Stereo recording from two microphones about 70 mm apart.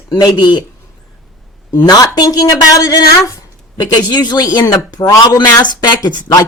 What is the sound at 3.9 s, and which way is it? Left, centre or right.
Speech, left.